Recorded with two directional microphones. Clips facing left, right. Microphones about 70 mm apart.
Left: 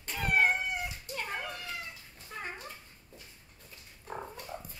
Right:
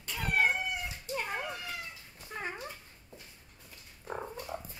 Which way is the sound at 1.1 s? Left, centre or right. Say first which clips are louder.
Right 4 dB; centre.